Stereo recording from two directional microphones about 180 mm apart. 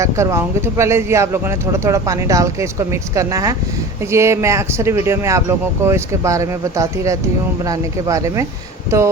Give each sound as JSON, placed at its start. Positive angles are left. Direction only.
{"t": 0.0, "sound": "speech", "side_deg": -15}